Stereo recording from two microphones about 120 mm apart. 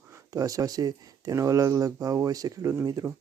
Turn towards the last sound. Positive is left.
turn(degrees=-30)  # may be behind; listen again after turning